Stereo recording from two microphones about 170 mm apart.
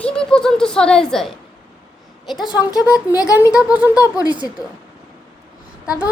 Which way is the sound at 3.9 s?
20° left (ahead or behind).